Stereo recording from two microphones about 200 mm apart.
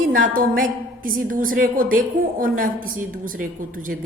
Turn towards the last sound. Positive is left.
turn(degrees=-45)  # may be behind; listen again after turning